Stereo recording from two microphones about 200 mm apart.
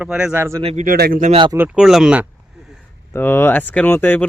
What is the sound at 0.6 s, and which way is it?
Speech, 30° right (ahead or behind).